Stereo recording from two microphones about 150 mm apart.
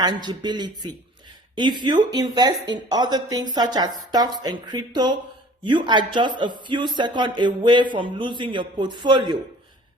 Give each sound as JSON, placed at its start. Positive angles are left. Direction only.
{"t": 0.0, "sound": "a man's voice", "side_deg": -30}